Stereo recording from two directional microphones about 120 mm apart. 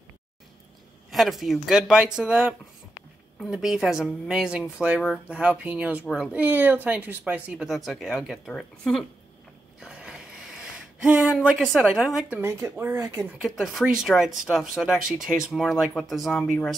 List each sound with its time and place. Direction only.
1.1 s speech: centre (ahead or behind)
9.8 s a sound: 5° right (ahead or behind)
12.4 s speech: 20° right (ahead or behind)
13.4 s speech: centre (ahead or behind)